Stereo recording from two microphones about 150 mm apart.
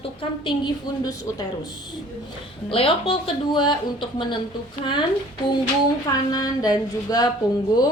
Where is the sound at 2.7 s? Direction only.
35° left (ahead or behind).